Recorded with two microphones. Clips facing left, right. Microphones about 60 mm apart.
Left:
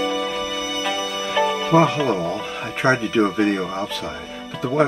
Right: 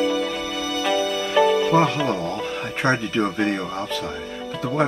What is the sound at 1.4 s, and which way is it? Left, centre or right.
Speech, centre.